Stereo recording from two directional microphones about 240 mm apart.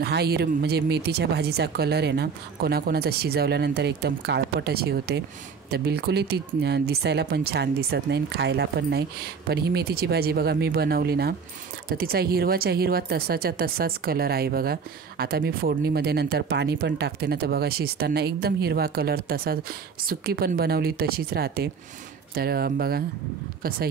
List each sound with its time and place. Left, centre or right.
0.0 s speech: right